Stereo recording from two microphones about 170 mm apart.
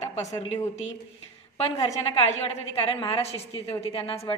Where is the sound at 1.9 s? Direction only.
40° left (ahead or behind).